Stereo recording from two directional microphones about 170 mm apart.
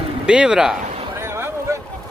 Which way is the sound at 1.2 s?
15° right (ahead or behind).